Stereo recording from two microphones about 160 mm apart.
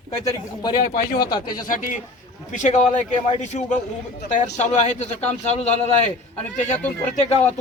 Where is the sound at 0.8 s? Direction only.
65° left (ahead or behind).